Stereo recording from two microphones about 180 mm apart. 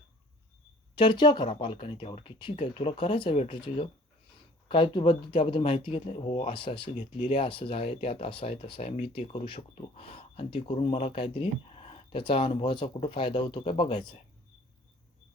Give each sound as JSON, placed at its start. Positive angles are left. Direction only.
{"t": 0.9, "sound": "speech", "side_deg": 25}